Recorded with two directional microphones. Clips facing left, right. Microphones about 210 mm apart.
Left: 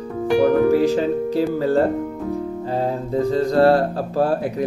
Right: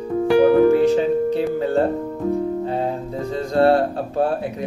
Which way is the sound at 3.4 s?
35° left (ahead or behind).